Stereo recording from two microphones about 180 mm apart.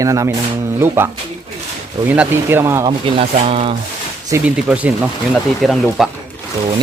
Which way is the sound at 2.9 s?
30° right (ahead or behind).